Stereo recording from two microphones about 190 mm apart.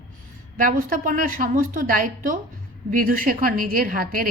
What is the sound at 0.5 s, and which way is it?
A woman's voice, 45° right (ahead or behind).